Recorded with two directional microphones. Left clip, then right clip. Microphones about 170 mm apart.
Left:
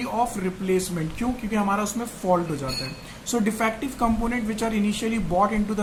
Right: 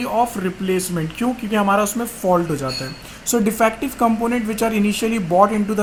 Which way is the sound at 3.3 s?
55° right (ahead or behind).